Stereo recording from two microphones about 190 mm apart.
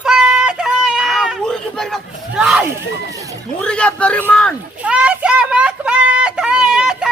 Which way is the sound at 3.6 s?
5° left (ahead or behind).